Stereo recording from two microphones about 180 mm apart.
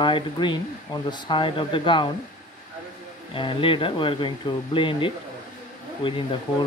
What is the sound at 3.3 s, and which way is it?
Speech, 30° left (ahead or behind).